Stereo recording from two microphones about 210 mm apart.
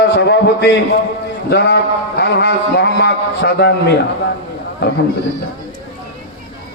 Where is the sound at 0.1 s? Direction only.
55° left (ahead or behind).